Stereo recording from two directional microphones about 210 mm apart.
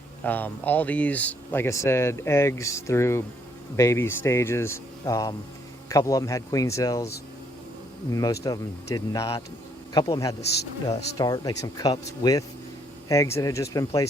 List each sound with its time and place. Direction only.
0.3 s speech: 10° left (ahead or behind)
8.1 s speech: 15° left (ahead or behind)